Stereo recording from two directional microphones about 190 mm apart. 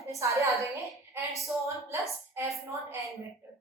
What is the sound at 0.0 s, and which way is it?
Speech, 15° right (ahead or behind).